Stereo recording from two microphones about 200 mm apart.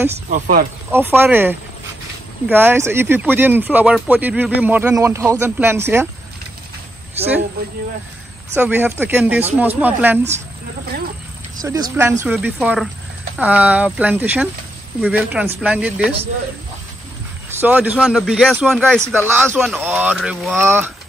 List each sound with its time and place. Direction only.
0.1 s speech: 40° right (ahead or behind)
0.9 s speech: 10° right (ahead or behind)
8.5 s speech: 10° right (ahead or behind)
11.6 s speech: 15° right (ahead or behind)
17.6 s speech: 10° right (ahead or behind)
19.1 s speech: 10° right (ahead or behind)
20.5 s speech: 10° right (ahead or behind)